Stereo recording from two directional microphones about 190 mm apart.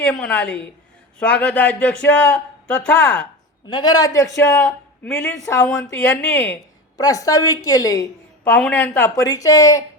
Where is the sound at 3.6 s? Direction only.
20° left (ahead or behind).